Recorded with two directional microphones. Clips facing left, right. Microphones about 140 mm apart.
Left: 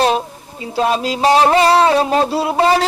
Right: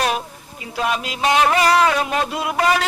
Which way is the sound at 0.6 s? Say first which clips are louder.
Left 6 dB; 30° left (ahead or behind).